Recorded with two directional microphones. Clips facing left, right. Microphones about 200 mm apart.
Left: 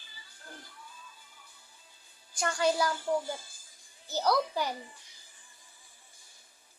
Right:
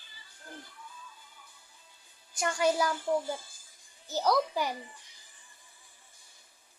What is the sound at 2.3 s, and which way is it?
Speech, 20° right (ahead or behind).